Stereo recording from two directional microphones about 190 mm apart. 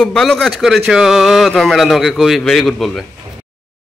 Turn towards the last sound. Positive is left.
turn(degrees=0)  # may be behind; listen again after turning